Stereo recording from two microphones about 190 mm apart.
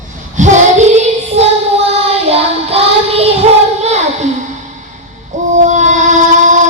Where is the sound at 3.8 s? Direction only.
35° right (ahead or behind).